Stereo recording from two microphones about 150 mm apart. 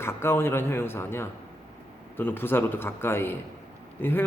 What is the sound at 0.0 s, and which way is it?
A man's voice, 15° left (ahead or behind).